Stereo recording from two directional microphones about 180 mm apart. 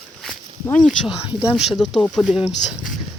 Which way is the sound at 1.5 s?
Centre (ahead or behind).